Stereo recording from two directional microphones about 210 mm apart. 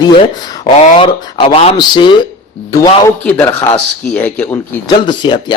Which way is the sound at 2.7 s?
10° left (ahead or behind).